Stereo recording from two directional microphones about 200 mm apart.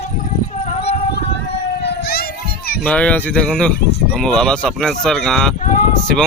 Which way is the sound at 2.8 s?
5° left (ahead or behind).